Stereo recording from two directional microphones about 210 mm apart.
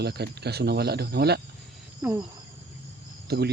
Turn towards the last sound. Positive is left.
turn(degrees=-50)  # may be behind; listen again after turning